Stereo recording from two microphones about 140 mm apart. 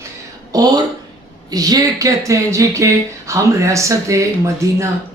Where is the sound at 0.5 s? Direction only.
25° right (ahead or behind).